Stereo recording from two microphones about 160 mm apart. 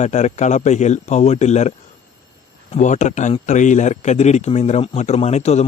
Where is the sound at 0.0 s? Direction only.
45° left (ahead or behind).